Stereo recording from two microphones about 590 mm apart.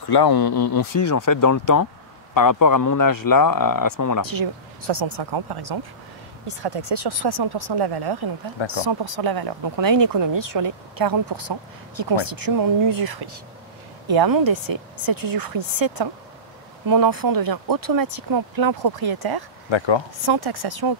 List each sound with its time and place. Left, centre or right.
0.1 s a man's voice: left
4.3 s speech: right